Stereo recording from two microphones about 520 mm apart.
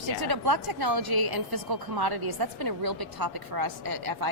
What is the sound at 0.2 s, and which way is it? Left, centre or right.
A woman's voice, right.